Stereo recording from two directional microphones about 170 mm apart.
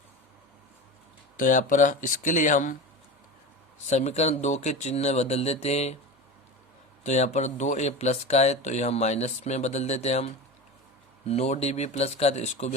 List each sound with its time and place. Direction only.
1.4 s speech: 50° left (ahead or behind)
3.8 s speech: 40° left (ahead or behind)
7.0 s speech: 45° left (ahead or behind)
11.3 s speech: 40° left (ahead or behind)